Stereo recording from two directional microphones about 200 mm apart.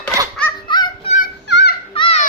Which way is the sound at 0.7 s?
20° left (ahead or behind).